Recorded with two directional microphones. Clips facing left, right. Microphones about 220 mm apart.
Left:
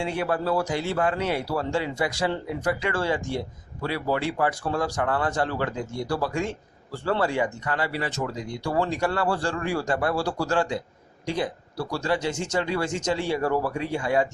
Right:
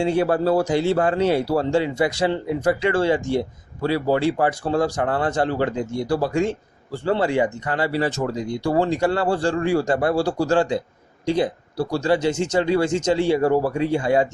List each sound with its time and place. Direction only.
0.0 s speech: 30° right (ahead or behind)